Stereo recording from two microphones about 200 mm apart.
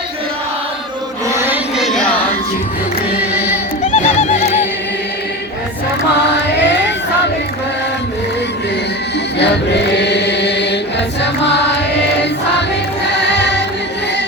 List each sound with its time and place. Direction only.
1.8 s music: centre (ahead or behind)
3.3 s music: 5° right (ahead or behind)
3.9 s music: 35° left (ahead or behind)
6.6 s choir: 60° left (ahead or behind)
9.4 s choir: 60° left (ahead or behind)
11.2 s music: 60° left (ahead or behind)
13.3 s music: 60° left (ahead or behind)